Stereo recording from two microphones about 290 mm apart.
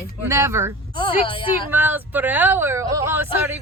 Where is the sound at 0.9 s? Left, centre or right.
Centre.